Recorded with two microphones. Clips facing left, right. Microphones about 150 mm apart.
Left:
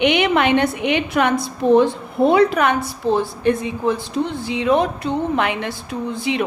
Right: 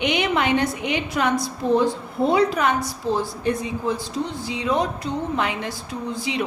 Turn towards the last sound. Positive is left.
turn(degrees=60)  # may be behind; listen again after turning